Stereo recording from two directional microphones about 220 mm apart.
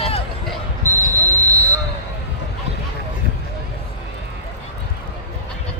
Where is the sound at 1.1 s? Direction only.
15° right (ahead or behind).